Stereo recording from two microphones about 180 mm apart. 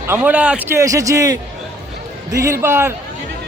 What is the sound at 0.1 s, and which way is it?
Speech, 5° right (ahead or behind).